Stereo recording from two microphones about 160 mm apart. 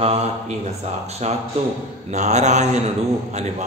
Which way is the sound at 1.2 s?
45° right (ahead or behind).